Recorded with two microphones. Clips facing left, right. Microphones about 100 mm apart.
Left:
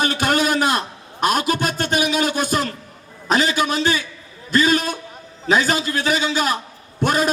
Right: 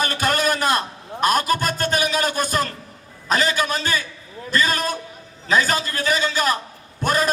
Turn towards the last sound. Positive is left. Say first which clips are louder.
# left 2 dB
turn(degrees=-40)  # may be behind; listen again after turning